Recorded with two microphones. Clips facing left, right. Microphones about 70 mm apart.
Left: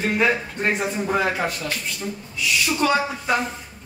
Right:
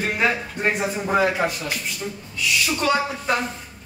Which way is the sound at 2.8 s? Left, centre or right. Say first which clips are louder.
Left 1 dB; centre.